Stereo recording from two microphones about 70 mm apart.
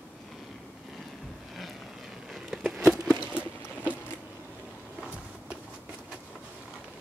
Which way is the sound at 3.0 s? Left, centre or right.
Centre.